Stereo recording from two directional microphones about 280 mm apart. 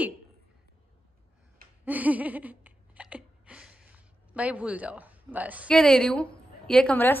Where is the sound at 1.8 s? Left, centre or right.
Centre.